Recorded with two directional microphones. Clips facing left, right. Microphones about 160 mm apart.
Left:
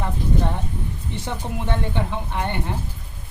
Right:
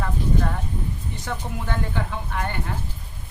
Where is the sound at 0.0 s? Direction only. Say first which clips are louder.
Left 1 dB; 25° left (ahead or behind).